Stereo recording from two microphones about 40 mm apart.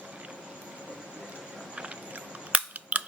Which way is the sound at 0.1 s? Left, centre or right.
Right.